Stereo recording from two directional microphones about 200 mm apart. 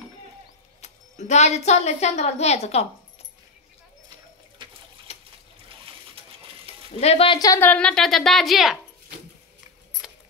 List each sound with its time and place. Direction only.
0.7 s a woman's voice: 35° left (ahead or behind)
4.6 s water: 25° right (ahead or behind)
5.1 s trickle: 30° left (ahead or behind)
7.0 s a woman's voice: 30° left (ahead or behind); by 8.7 s centre (ahead or behind)